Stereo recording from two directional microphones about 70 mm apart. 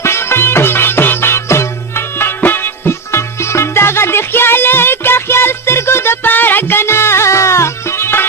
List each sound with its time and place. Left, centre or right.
0.0 s music: left